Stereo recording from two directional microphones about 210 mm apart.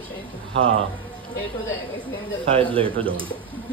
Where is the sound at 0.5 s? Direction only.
25° right (ahead or behind).